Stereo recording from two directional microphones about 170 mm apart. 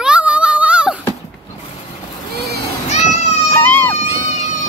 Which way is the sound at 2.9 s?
40° left (ahead or behind).